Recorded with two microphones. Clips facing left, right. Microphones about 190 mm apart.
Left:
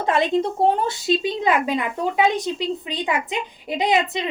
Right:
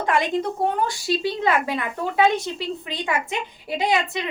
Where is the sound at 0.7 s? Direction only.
20° left (ahead or behind).